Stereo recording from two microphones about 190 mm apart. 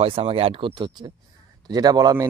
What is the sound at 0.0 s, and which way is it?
Speech, 30° right (ahead or behind).